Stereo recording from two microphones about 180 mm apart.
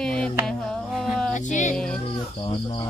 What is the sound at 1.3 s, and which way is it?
Speech, 45° left (ahead or behind).